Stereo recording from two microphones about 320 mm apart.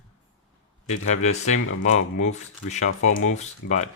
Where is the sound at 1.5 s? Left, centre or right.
Left.